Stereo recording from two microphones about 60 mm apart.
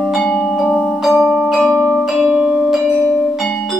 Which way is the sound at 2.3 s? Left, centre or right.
Centre.